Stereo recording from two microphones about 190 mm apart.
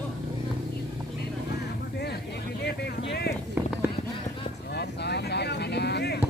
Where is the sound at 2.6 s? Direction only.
65° left (ahead or behind).